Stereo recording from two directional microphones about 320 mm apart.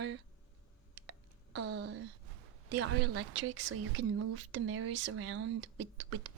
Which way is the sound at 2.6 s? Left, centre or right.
Right.